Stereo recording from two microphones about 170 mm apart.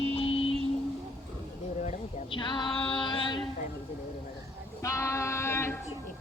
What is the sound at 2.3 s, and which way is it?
Music, 30° left (ahead or behind).